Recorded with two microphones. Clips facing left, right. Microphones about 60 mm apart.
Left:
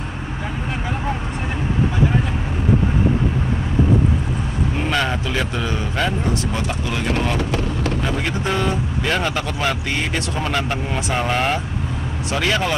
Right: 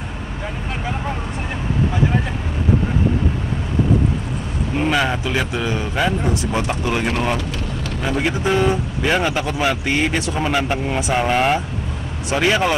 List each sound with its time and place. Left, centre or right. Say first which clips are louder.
4.7 s speech: right 4 dB; centre
6.7 s speech: right 2 dB; right
8.0 s speech: right 2 dB; centre